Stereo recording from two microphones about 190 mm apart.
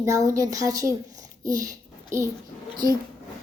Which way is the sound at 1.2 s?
20° right (ahead or behind).